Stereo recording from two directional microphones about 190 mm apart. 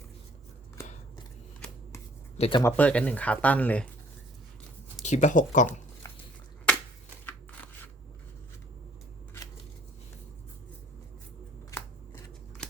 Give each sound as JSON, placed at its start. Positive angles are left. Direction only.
{"t": 2.4, "sound": "speech", "side_deg": 25}
{"t": 2.6, "sound": "speech", "side_deg": 10}
{"t": 5.0, "sound": "speech", "side_deg": 40}